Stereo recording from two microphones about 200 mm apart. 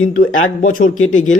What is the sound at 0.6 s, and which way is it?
Speech, 45° left (ahead or behind).